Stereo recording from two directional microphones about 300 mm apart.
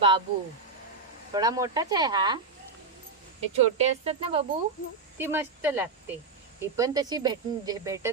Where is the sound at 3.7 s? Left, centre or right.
Right.